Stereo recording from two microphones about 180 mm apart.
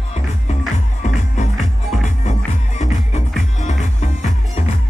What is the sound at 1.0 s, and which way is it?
Music, 40° left (ahead or behind).